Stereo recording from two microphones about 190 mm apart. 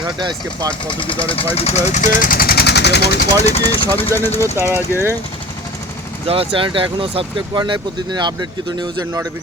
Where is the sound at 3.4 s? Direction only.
30° left (ahead or behind).